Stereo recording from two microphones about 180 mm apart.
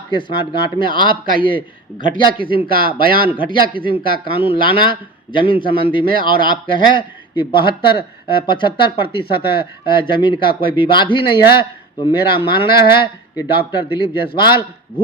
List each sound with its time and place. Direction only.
0.1 s speech: 25° left (ahead or behind)